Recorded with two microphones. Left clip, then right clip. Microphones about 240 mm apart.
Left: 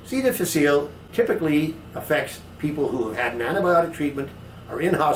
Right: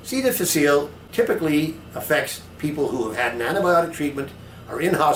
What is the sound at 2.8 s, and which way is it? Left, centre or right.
Speech, left.